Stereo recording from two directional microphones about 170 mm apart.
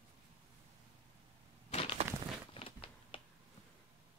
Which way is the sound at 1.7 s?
35° left (ahead or behind).